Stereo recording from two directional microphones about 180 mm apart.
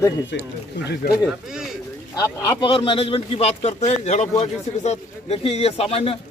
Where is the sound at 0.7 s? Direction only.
70° left (ahead or behind).